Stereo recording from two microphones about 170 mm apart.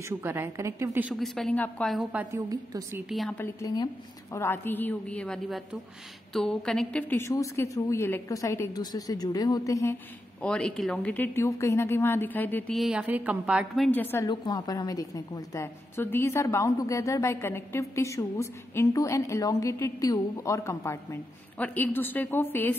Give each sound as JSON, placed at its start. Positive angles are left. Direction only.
{"t": 0.2, "sound": "a woman's voice", "side_deg": -15}
{"t": 1.1, "sound": "a woman's voice", "side_deg": 0}
{"t": 2.3, "sound": "a woman's voice", "side_deg": -15}
{"t": 3.1, "sound": "a woman's voice", "side_deg": 0}
{"t": 3.3, "sound": "a woman's voice", "side_deg": 20}
{"t": 10.4, "sound": "a woman's voice", "side_deg": 5}
{"t": 12.7, "sound": "a woman's voice", "side_deg": -5}
{"t": 13.8, "sound": "a woman's voice", "side_deg": 10}
{"t": 14.2, "sound": "a woman's voice", "side_deg": 25}